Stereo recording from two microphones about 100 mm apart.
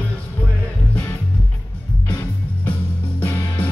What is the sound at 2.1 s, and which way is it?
Music, 15° left (ahead or behind).